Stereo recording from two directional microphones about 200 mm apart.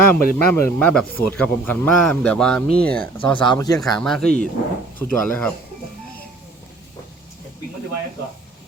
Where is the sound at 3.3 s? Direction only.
20° left (ahead or behind).